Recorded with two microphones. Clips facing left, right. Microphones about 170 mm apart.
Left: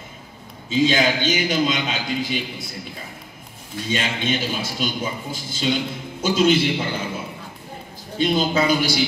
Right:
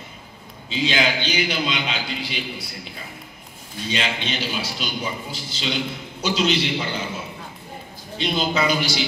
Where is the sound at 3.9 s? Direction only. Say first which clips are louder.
Left 3 dB; 50° left (ahead or behind).